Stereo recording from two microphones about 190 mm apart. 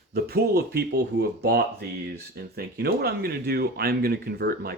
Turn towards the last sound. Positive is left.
turn(degrees=-55)  # may be behind; listen again after turning